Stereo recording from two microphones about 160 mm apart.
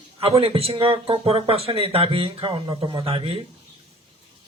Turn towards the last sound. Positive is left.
turn(degrees=-35)  # may be behind; listen again after turning